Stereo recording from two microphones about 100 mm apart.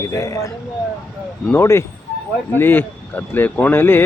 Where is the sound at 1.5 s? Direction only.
25° left (ahead or behind).